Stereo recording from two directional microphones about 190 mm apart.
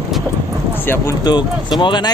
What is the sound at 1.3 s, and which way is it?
Speech, 25° left (ahead or behind).